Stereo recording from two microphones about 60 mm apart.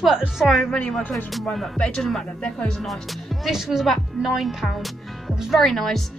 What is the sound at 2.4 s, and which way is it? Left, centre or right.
Speech, centre.